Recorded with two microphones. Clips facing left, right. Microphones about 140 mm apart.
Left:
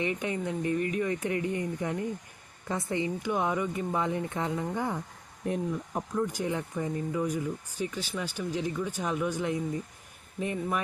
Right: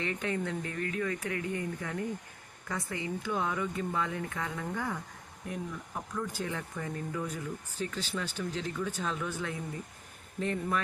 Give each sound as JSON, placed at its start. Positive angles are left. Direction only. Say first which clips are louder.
{"t": 0.0, "sound": "speech", "louder": "left 3 dB", "side_deg": 15}
{"t": 6.2, "sound": "speech", "louder": "left 5 dB", "side_deg": 15}